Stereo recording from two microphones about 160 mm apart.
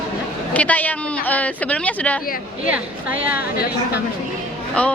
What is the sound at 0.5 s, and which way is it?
A woman's voice, 10° left (ahead or behind).